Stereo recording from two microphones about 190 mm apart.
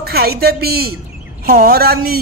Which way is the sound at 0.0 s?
55° right (ahead or behind).